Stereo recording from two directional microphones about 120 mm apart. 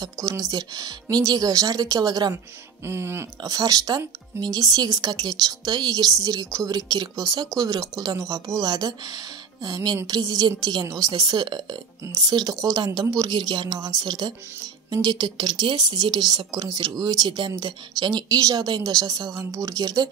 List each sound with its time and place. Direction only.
0.0 s a woman's voice: 30° right (ahead or behind)
2.9 s a woman's voice: 20° right (ahead or behind)